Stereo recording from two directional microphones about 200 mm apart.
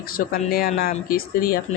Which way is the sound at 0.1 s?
45° left (ahead or behind).